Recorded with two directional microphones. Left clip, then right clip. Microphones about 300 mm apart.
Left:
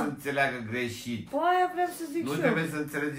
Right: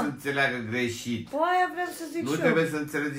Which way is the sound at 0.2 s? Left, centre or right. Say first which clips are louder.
Right 2 dB; centre.